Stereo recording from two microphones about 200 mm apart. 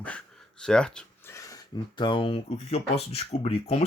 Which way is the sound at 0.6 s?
5° left (ahead or behind).